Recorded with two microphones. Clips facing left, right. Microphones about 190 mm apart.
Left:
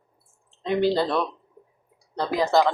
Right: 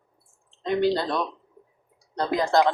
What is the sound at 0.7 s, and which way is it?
Speech, 5° left (ahead or behind).